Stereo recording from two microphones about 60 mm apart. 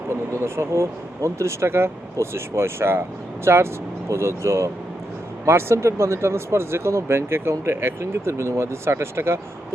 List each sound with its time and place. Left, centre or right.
0.1 s speech: right